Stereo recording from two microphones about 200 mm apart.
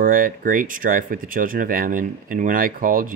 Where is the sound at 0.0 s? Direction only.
45° right (ahead or behind).